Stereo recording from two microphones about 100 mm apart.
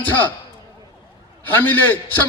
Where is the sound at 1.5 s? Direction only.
20° left (ahead or behind).